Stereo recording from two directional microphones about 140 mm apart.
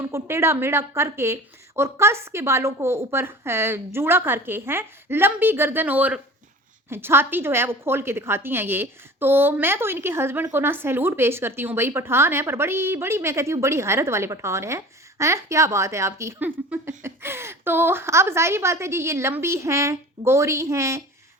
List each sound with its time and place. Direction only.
0.0 s a woman's voice: 20° right (ahead or behind)